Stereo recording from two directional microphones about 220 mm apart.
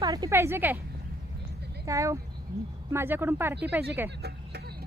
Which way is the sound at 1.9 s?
15° right (ahead or behind).